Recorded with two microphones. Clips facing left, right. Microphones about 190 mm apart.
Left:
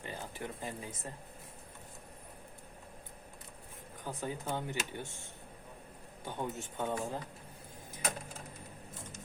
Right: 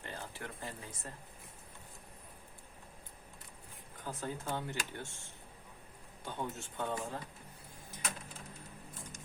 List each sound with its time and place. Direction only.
0.0 s speech: 15° left (ahead or behind)
4.0 s speech: 15° left (ahead or behind)
6.2 s speech: 15° left (ahead or behind)